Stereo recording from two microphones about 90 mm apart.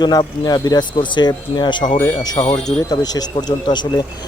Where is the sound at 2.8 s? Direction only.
45° left (ahead or behind).